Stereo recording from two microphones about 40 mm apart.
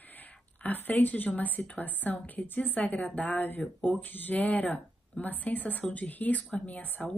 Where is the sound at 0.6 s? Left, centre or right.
Left.